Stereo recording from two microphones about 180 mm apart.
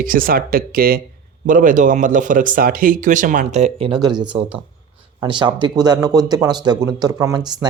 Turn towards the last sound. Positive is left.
turn(degrees=-25)  # may be behind; listen again after turning